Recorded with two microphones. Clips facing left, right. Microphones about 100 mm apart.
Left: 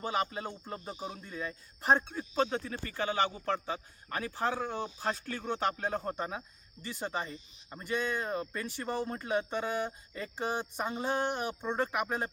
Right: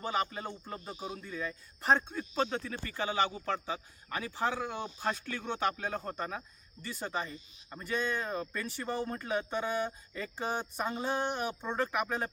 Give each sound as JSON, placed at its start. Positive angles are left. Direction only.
{"t": 0.0, "sound": "speech", "side_deg": 15}
{"t": 1.2, "sound": "speech", "side_deg": 25}
{"t": 1.8, "sound": "speech", "side_deg": 10}